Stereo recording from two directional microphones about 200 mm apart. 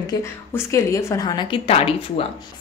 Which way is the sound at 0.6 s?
15° left (ahead or behind).